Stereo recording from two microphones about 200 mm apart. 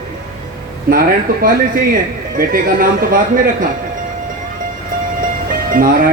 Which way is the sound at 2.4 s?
45° right (ahead or behind).